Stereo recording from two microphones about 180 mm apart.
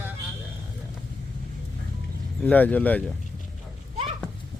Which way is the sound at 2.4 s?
10° left (ahead or behind).